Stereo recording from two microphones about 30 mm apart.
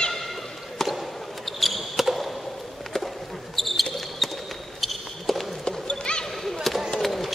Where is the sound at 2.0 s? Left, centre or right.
Centre.